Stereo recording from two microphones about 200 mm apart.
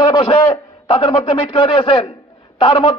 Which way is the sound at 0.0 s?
25° left (ahead or behind).